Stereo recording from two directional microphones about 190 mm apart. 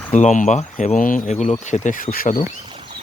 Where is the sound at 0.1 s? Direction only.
40° left (ahead or behind).